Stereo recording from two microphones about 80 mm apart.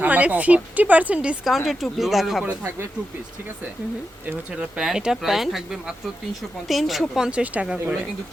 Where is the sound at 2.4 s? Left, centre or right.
Right.